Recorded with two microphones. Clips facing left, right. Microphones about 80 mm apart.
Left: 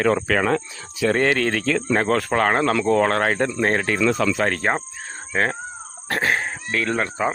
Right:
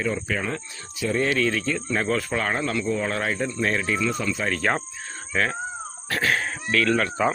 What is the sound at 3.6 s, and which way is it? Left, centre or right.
Speech, left.